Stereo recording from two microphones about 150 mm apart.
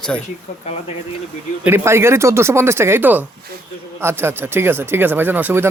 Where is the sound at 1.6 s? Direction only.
15° right (ahead or behind).